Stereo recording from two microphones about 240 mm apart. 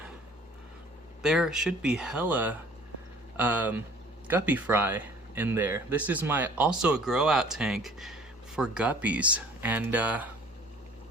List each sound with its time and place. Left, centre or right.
1.2 s speech: centre